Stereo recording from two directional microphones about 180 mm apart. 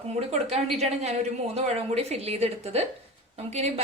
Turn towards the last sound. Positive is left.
turn(degrees=-35)  # may be behind; listen again after turning